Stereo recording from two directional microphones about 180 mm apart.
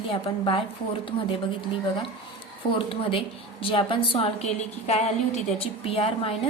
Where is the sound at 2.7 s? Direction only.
30° left (ahead or behind).